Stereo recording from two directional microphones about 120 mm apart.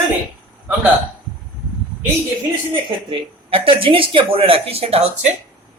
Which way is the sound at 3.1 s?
50° right (ahead or behind).